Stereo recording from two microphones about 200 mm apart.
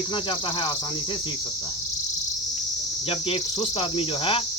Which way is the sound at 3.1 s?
30° left (ahead or behind).